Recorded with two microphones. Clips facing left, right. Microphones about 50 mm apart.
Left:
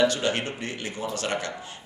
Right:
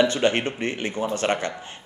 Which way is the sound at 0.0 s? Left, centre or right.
Right.